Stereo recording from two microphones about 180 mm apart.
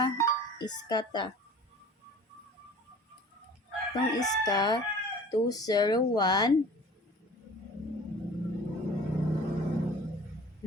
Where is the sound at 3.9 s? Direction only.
20° left (ahead or behind).